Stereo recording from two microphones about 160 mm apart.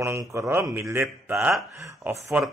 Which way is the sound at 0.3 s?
15° right (ahead or behind).